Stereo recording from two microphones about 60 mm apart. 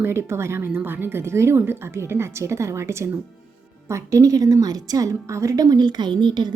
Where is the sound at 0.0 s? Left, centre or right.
Right.